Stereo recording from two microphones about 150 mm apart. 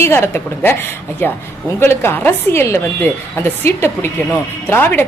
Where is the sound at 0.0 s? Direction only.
15° left (ahead or behind).